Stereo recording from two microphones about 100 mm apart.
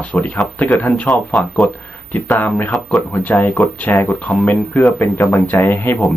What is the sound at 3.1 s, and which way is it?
Speech, 15° left (ahead or behind).